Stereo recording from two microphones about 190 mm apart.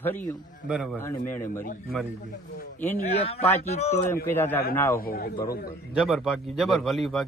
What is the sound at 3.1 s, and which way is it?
Speech, 30° left (ahead or behind).